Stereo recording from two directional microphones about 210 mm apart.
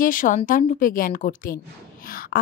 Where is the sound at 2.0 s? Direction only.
45° left (ahead or behind).